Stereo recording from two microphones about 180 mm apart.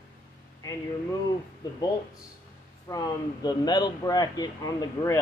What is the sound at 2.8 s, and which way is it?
Speech, 20° left (ahead or behind).